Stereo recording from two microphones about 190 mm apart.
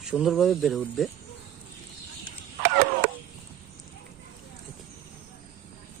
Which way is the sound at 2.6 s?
55° right (ahead or behind).